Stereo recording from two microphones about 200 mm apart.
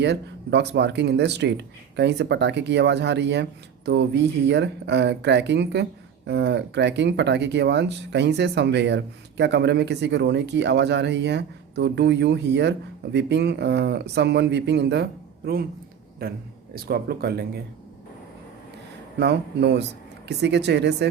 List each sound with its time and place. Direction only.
0.0 s speech: 60° right (ahead or behind)
19.2 s speech: 60° right (ahead or behind)